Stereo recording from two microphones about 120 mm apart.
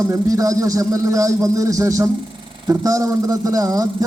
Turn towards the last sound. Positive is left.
turn(degrees=-30)  # may be behind; listen again after turning